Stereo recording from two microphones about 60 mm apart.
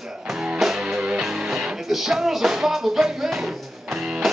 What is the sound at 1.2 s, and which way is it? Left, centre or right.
Music, centre.